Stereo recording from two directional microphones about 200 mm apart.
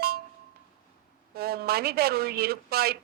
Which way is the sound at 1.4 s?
50° right (ahead or behind).